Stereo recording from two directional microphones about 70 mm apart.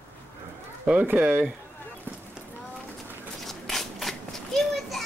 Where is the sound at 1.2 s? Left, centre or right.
Centre.